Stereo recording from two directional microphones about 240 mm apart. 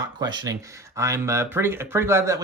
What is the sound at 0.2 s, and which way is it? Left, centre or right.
Speech, centre.